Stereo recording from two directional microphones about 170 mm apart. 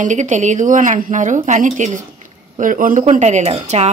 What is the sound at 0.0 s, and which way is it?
Speech, 45° right (ahead or behind).